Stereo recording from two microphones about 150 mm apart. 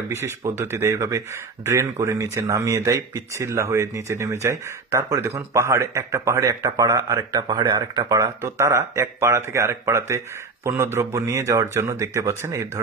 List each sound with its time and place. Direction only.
0.1 s speech: 15° right (ahead or behind)